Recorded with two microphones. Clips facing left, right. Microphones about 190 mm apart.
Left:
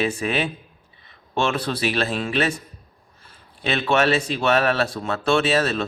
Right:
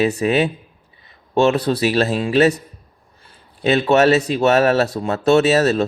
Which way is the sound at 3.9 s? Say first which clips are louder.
Right 5 dB; 40° right (ahead or behind).